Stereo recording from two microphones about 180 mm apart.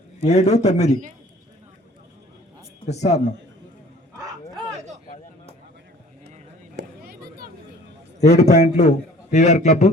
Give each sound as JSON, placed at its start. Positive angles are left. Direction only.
{"t": 0.3, "sound": "a man's voice", "side_deg": 40}
{"t": 2.8, "sound": "a man's voice", "side_deg": 40}
{"t": 6.7, "sound": "a sound", "side_deg": -60}
{"t": 8.2, "sound": "a man's voice", "side_deg": 40}